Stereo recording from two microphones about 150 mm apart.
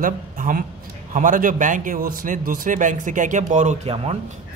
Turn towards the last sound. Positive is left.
turn(degrees=-40)  # may be behind; listen again after turning